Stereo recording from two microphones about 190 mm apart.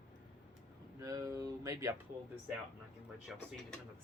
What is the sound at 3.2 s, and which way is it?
Speech, centre (ahead or behind).